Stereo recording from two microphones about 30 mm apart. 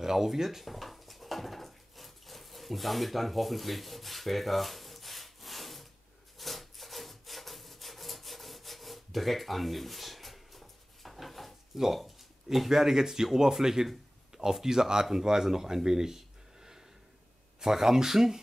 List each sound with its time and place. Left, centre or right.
0.0 s dog: centre
6.3 s wood: centre
11.7 s speech: centre